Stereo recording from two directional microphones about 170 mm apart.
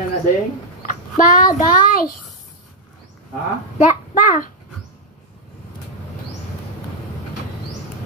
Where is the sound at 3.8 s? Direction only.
50° left (ahead or behind).